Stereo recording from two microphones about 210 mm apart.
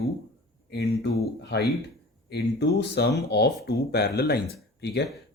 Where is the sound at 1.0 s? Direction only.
50° left (ahead or behind).